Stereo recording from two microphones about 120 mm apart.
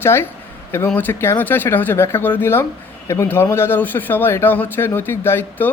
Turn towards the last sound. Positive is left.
turn(degrees=20)  # may be behind; listen again after turning